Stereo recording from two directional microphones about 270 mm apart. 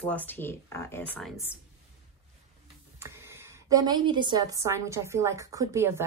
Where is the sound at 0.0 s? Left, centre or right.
Centre.